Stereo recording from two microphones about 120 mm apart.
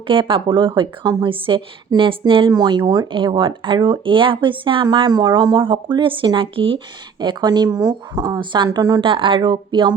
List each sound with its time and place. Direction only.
0.1 s speech: 45° right (ahead or behind)
9.0 s speech: 45° right (ahead or behind)